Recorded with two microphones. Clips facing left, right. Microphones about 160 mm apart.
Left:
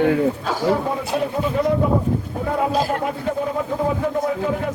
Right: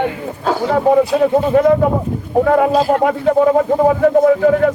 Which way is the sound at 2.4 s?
75° right (ahead or behind).